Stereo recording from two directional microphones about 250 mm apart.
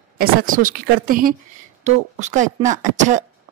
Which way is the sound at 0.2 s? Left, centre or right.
Right.